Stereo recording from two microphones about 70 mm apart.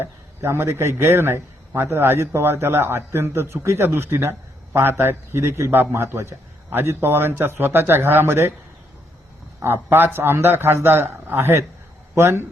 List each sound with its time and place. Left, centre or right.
0.0 s a man's voice: right
9.6 s a man's voice: right